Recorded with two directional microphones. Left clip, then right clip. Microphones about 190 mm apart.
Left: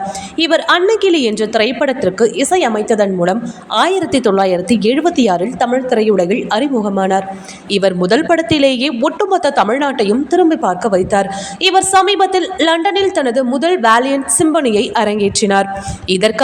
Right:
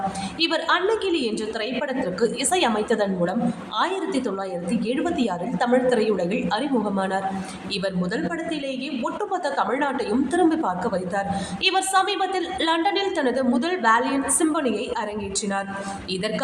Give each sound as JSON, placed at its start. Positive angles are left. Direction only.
{"t": 0.3, "sound": "a woman's voice", "side_deg": 35}